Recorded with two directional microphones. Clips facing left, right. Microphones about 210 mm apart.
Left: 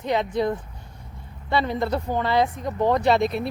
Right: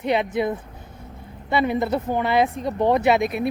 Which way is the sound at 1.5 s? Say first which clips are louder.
Right 2 dB; 15° right (ahead or behind).